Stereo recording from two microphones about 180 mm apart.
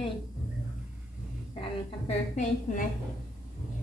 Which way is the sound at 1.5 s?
35° left (ahead or behind).